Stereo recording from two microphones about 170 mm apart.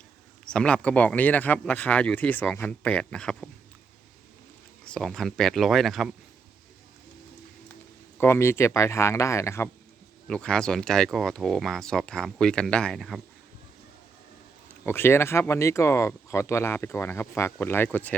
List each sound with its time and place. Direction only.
0.5 s speech: 5° left (ahead or behind)
4.9 s speech: 5° left (ahead or behind)
8.2 s speech: 15° left (ahead or behind)
10.2 s speech: 5° left (ahead or behind)
14.8 s speech: 15° left (ahead or behind)